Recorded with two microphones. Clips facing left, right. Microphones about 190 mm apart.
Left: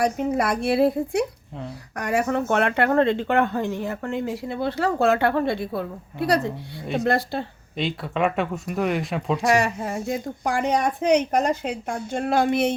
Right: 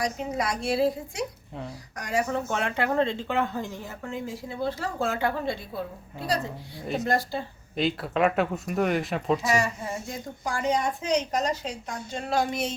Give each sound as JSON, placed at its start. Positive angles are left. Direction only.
{"t": 0.0, "sound": "speech", "side_deg": 55}
{"t": 7.8, "sound": "speech", "side_deg": 0}
{"t": 9.5, "sound": "speech", "side_deg": 65}